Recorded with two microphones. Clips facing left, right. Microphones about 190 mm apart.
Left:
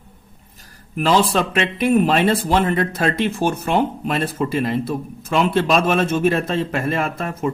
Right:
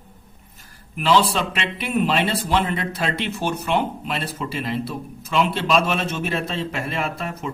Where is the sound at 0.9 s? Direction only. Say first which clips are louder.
Left 2 dB; 45° left (ahead or behind).